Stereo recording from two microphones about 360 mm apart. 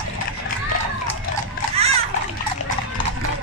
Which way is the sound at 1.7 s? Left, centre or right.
Centre.